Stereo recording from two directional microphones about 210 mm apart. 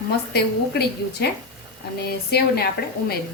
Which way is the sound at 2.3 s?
50° left (ahead or behind).